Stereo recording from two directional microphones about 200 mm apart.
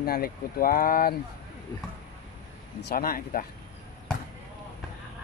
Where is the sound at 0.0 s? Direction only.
50° left (ahead or behind).